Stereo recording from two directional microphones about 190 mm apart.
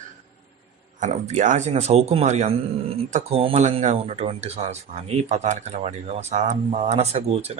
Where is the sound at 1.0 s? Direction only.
40° right (ahead or behind).